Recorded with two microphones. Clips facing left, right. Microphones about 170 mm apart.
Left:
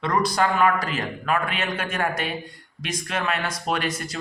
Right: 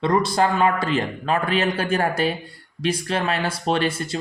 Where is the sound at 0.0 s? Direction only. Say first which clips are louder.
Right 3 dB; 25° right (ahead or behind).